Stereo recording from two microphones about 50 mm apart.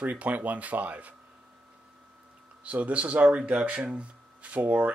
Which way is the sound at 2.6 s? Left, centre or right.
Right.